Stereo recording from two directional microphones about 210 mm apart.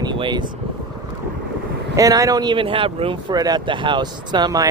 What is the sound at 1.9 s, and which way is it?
Speech, 15° right (ahead or behind).